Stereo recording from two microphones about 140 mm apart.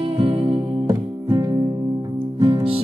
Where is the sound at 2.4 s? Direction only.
35° right (ahead or behind).